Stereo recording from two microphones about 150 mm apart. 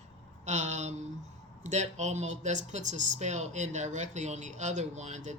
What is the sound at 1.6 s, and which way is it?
Speech, 50° right (ahead or behind).